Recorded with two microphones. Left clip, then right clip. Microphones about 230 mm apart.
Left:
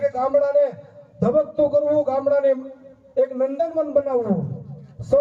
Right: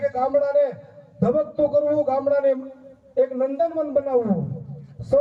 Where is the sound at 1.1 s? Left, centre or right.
Left.